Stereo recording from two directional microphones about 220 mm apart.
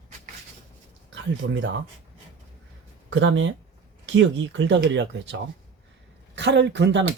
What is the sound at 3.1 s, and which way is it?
A woman's voice, 60° right (ahead or behind).